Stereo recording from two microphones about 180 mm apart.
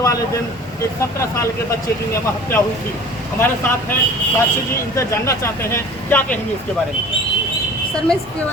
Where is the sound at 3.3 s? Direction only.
10° left (ahead or behind).